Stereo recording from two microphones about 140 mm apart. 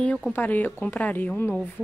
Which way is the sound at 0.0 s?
5° left (ahead or behind).